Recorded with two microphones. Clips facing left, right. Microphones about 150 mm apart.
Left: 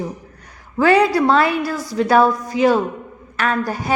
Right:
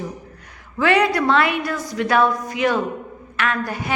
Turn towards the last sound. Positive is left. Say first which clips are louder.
# left 3 dB
turn(degrees=40)  # may be behind; listen again after turning